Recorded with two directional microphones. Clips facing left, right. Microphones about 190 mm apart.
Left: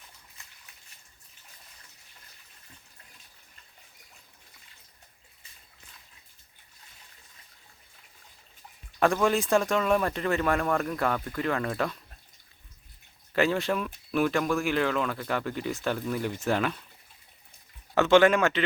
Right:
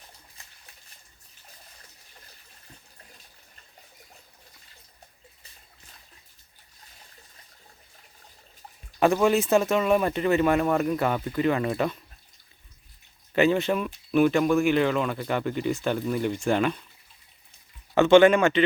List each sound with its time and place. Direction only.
9.0 s speech: 5° right (ahead or behind)
10.8 s speech: 15° right (ahead or behind)
13.3 s speech: centre (ahead or behind)
17.9 s speech: centre (ahead or behind)